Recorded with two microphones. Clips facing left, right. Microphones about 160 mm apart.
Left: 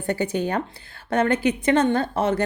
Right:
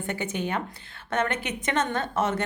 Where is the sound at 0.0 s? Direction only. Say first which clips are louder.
Left 6 dB; 35° left (ahead or behind).